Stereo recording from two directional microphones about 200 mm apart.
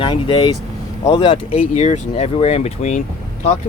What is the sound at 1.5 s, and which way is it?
Speech, 35° left (ahead or behind).